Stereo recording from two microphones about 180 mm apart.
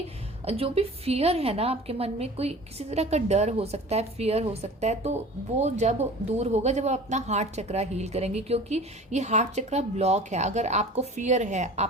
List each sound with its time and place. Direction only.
0.4 s speech: 35° right (ahead or behind)